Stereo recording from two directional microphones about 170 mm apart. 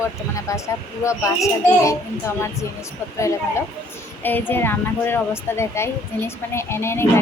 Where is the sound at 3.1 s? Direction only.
15° left (ahead or behind).